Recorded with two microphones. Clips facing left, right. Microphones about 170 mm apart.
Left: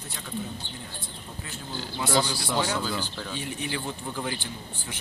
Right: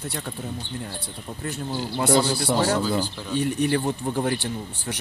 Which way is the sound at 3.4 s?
50° right (ahead or behind).